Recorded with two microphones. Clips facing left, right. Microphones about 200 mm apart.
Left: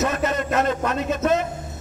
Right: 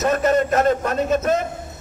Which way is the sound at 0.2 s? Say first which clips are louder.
Right 5 dB; 45° right (ahead or behind).